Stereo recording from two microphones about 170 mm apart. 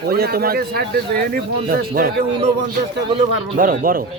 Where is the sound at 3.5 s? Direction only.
55° right (ahead or behind).